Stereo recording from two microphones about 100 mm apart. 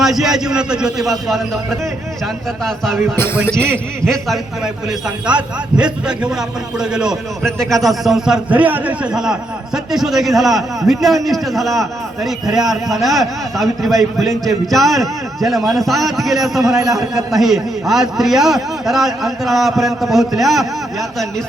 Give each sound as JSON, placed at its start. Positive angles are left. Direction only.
{"t": 0.0, "sound": "a man's voice", "side_deg": 0}
{"t": 2.6, "sound": "a man's voice", "side_deg": 0}
{"t": 3.6, "sound": "a man's voice", "side_deg": -20}
{"t": 4.1, "sound": "a man's voice", "side_deg": 0}